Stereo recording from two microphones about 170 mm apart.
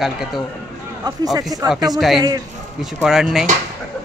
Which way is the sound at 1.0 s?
25° right (ahead or behind).